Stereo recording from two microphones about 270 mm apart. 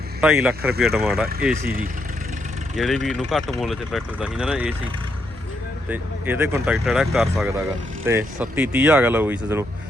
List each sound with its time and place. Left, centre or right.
0.2 s speech: centre
1.6 s speech: right
2.7 s speech: centre
5.9 s speech: centre